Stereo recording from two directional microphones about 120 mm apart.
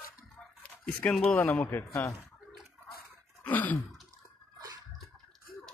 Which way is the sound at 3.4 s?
15° left (ahead or behind).